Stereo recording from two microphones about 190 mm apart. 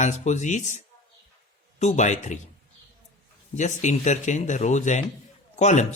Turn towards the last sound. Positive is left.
turn(degrees=40)  # may be behind; listen again after turning